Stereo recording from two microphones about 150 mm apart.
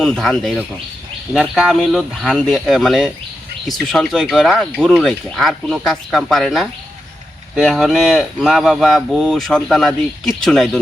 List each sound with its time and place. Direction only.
0.0 s speech: centre (ahead or behind)